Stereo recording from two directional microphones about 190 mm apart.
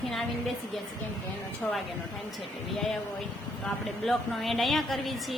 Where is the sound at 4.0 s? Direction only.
Centre (ahead or behind).